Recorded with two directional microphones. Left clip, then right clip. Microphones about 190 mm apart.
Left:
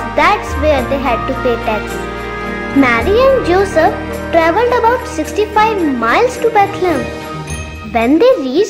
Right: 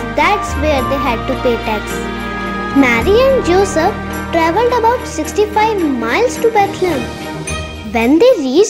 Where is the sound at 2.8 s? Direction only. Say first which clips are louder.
Even; 25° right (ahead or behind).